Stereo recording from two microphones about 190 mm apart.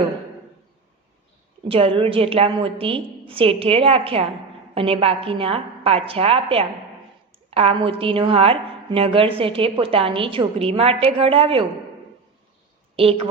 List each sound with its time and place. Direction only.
1.6 s a woman's voice: 30° right (ahead or behind)
13.0 s a woman's voice: 30° right (ahead or behind)